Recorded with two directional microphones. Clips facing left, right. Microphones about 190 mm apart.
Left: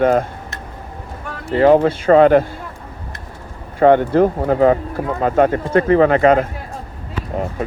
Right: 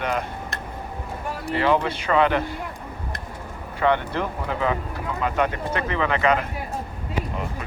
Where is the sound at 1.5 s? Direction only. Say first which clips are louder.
Left 10 dB; 45° left (ahead or behind).